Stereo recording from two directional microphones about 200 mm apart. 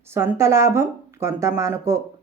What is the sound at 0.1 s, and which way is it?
Speech, 10° right (ahead or behind).